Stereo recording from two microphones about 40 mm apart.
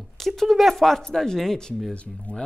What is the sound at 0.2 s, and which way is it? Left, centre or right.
Speech, centre.